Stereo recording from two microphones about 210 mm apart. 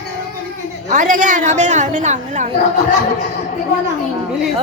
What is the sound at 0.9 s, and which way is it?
A woman's voice, 40° right (ahead or behind).